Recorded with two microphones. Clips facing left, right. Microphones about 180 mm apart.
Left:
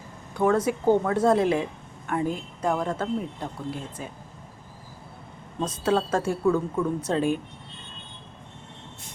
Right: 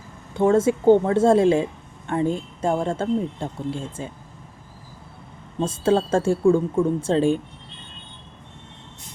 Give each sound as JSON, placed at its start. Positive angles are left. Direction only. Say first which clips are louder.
{"t": 0.3, "sound": "speech", "louder": "right 5 dB", "side_deg": -25}
{"t": 5.5, "sound": "speech", "louder": "right 4 dB", "side_deg": -30}